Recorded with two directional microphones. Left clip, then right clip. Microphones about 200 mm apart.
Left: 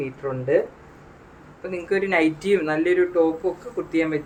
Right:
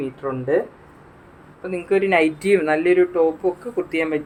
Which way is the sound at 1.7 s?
30° right (ahead or behind).